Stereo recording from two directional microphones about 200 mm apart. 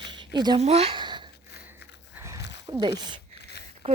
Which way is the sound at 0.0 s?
25° right (ahead or behind).